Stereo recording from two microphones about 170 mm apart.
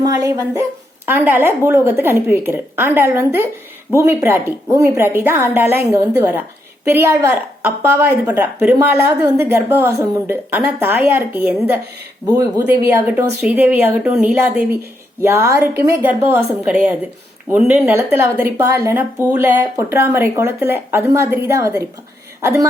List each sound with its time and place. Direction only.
0.0 s speech: 20° right (ahead or behind)